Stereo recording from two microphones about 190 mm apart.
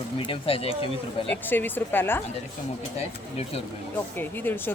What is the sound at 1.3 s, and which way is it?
Speech, 10° left (ahead or behind).